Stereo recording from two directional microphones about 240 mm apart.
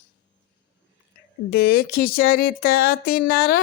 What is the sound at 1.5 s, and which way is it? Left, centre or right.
Speech, left.